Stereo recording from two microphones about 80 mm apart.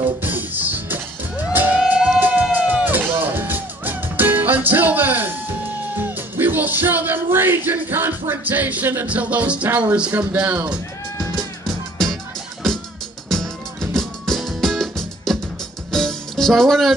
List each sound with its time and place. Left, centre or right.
0.2 s music: right
10.3 s speech: centre
11.6 s music: centre
13.3 s music: centre